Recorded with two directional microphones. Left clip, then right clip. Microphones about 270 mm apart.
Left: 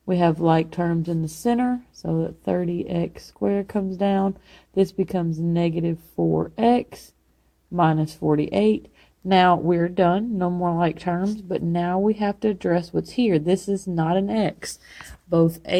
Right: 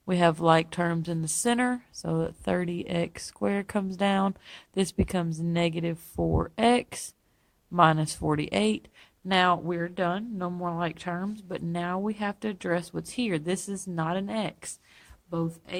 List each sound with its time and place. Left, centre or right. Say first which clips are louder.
0.1 s speech: left 2 dB; right
6.1 s speech: left 6 dB; right
6.6 s speech: left 2 dB; right
9.3 s speech: left 7 dB; centre
13.1 s speech: left 9 dB; right
13.4 s speech: left 10 dB; centre
15.3 s speech: left 13 dB; centre